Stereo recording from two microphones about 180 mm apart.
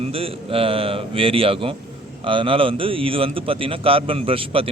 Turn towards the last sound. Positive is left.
turn(degrees=-30)  # may be behind; listen again after turning